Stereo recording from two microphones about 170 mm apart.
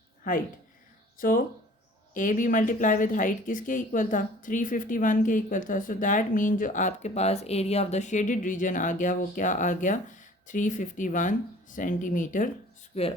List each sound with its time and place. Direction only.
0.3 s speech: 50° left (ahead or behind)
12.9 s speech: 35° left (ahead or behind)